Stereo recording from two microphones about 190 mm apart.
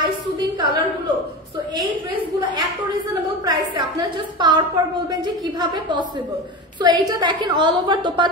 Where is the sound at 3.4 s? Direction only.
20° right (ahead or behind).